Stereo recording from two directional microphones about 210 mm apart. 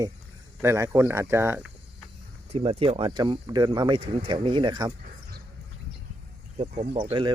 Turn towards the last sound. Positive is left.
turn(degrees=-25)  # may be behind; listen again after turning